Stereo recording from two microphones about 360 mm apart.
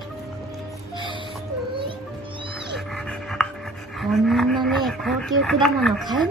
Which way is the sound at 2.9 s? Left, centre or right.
Centre.